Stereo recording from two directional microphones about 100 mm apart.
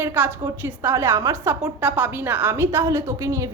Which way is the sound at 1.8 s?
20° right (ahead or behind).